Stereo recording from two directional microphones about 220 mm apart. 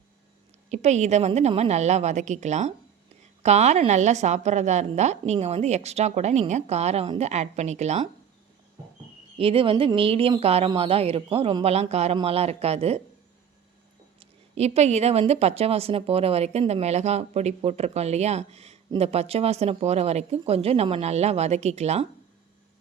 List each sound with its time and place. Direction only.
0.7 s a woman's voice: 30° right (ahead or behind)
9.4 s speech: 25° right (ahead or behind)
14.2 s speech: 30° right (ahead or behind)